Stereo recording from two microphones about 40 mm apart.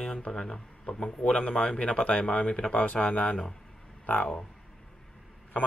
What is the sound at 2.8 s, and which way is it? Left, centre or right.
Speech, left.